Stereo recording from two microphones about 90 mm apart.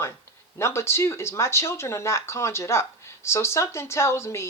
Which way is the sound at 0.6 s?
30° left (ahead or behind).